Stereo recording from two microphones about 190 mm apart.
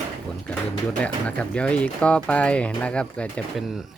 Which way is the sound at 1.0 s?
5° left (ahead or behind).